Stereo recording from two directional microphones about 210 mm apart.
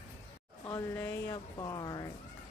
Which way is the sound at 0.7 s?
15° left (ahead or behind).